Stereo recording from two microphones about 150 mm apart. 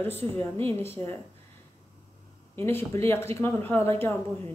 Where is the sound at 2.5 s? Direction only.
15° left (ahead or behind).